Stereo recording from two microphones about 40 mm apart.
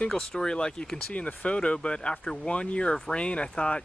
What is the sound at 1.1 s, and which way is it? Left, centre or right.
Speech, left.